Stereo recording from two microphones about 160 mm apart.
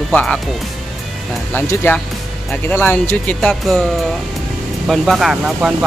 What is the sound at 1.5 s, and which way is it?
Speech, 10° left (ahead or behind).